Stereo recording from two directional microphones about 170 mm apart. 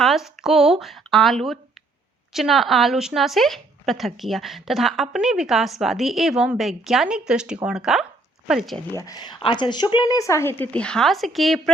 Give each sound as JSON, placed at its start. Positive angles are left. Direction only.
{"t": 0.0, "sound": "a woman's voice", "side_deg": 0}
{"t": 9.0, "sound": "speech", "side_deg": 25}